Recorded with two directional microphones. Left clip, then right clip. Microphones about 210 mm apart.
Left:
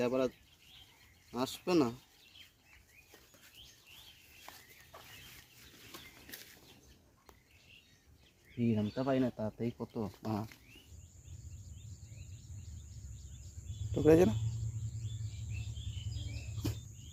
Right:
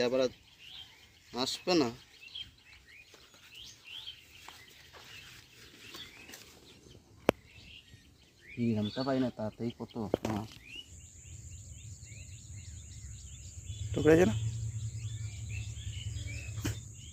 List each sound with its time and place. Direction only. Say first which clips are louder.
0.0 s speech: right 3 dB; 45° left (ahead or behind)
1.3 s speech: right 3 dB; 50° left (ahead or behind)
4.4 s a sound: right 1 dB; 50° left (ahead or behind)
8.5 s speech: right 1 dB; 5° left (ahead or behind)
9.6 s speech: right 5 dB; 25° left (ahead or behind)
13.9 s speech: right 1 dB; centre (ahead or behind)
16.6 s cricket: right 2 dB; centre (ahead or behind)